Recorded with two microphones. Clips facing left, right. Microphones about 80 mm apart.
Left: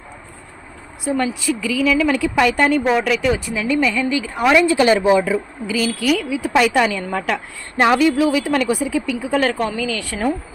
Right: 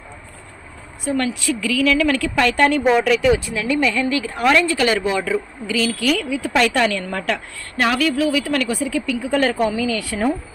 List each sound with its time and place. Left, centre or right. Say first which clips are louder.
1.0 s a woman's voice: left 1 dB; centre
7.8 s a woman's voice: left 4 dB; left
9.6 s a woman's voice: right 2 dB; centre